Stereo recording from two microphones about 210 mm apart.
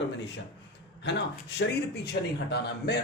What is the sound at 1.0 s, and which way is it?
Speech, 55° left (ahead or behind).